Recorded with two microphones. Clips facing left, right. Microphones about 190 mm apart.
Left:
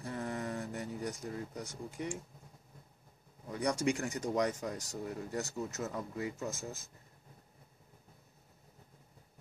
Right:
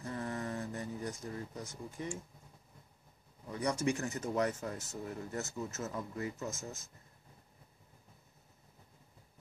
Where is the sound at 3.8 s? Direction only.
15° left (ahead or behind).